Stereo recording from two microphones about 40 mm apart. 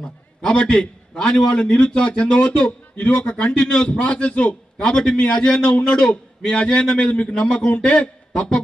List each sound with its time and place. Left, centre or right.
0.0 s a man's voice: left